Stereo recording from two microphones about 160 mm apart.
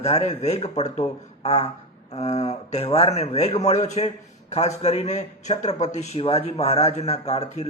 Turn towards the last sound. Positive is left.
turn(degrees=40)  # may be behind; listen again after turning